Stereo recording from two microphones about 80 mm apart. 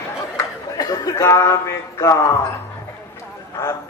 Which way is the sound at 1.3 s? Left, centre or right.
Left.